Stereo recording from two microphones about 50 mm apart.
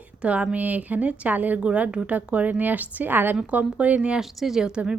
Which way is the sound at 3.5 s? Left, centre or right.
Right.